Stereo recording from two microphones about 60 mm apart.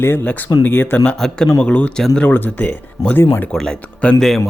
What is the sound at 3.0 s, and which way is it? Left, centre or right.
Speech, left.